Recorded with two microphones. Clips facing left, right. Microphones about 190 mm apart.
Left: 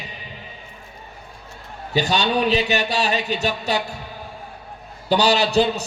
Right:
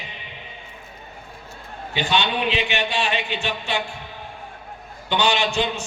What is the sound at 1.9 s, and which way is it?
A man's voice, 40° left (ahead or behind).